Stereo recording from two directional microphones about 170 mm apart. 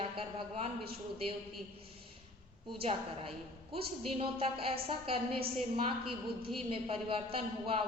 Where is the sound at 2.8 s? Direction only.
35° right (ahead or behind).